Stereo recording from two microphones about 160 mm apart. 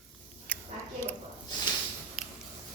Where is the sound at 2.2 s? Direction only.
5° right (ahead or behind).